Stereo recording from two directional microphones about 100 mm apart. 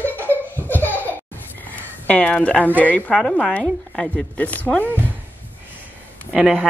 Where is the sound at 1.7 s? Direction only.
15° left (ahead or behind).